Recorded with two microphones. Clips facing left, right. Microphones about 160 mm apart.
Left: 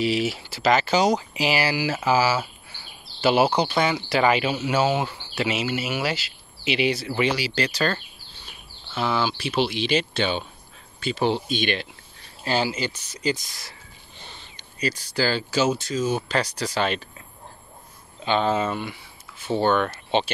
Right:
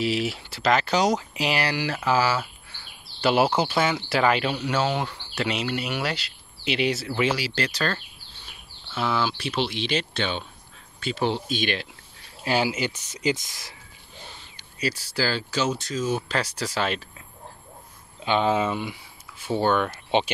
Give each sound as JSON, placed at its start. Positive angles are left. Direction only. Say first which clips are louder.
{"t": 0.0, "sound": "speech", "louder": "left 2 dB", "side_deg": 0}
{"t": 12.4, "sound": "speech", "louder": "even", "side_deg": -10}
{"t": 14.2, "sound": "speech", "louder": "left 1 dB", "side_deg": -5}
{"t": 18.2, "sound": "speech", "louder": "even", "side_deg": -10}